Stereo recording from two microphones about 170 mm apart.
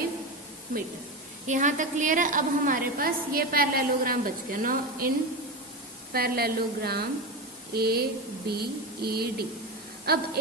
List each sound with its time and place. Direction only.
0.7 s a woman's voice: 55° right (ahead or behind)
6.1 s a woman's voice: 65° right (ahead or behind)
8.4 s a sound: 65° right (ahead or behind)
10.1 s a woman's voice: 65° right (ahead or behind)